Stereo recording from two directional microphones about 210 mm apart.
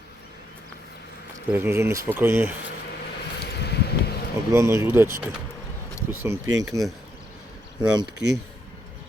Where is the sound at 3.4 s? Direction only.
50° left (ahead or behind).